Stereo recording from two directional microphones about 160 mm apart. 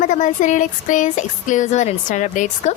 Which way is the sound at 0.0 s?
50° left (ahead or behind).